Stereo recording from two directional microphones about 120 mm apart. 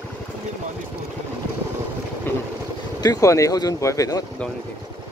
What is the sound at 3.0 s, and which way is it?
Speech, 30° left (ahead or behind).